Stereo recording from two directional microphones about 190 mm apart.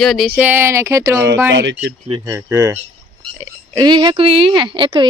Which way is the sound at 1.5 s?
75° right (ahead or behind).